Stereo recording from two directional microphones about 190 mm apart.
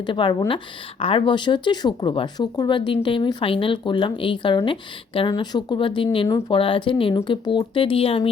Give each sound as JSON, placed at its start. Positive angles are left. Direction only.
{"t": 0.0, "sound": "a woman's voice", "side_deg": 25}